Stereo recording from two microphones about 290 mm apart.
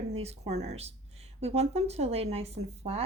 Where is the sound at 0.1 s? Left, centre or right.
Right.